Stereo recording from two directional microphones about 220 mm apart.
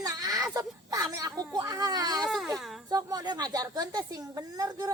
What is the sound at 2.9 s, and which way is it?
A woman's voice, 15° right (ahead or behind).